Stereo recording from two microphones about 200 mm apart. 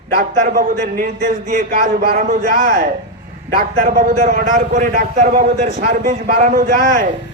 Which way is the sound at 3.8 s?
40° right (ahead or behind).